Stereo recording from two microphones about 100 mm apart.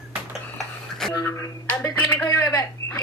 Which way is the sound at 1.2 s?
25° left (ahead or behind).